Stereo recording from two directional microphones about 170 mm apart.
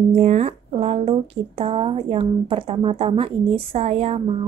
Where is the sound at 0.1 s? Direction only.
40° right (ahead or behind).